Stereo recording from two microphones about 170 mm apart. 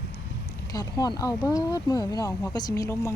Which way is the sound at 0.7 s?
20° left (ahead or behind).